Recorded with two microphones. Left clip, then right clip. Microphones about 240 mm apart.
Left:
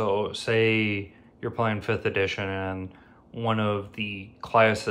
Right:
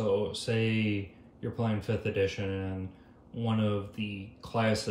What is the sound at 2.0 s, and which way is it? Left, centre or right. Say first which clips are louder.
Speech: left 3 dB; centre.